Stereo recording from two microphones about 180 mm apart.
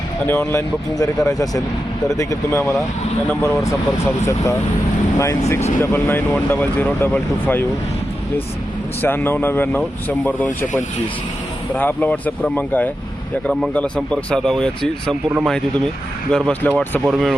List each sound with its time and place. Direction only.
0.3 s speech: 15° left (ahead or behind)
5.8 s speech: 15° left (ahead or behind)
9.0 s speech: 10° left (ahead or behind)
11.7 s speech: 10° left (ahead or behind)